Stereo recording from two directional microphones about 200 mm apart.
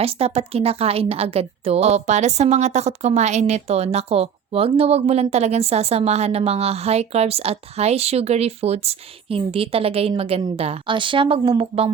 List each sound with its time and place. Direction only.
0.0 s a woman's voice: 30° right (ahead or behind)